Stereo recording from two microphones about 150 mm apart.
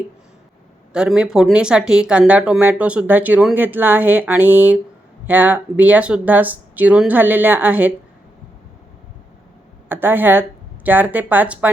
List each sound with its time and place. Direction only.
0.9 s speech: 5° right (ahead or behind)
9.9 s speech: 15° right (ahead or behind)